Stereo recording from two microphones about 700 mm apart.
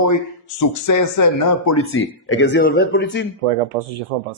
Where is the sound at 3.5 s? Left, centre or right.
Right.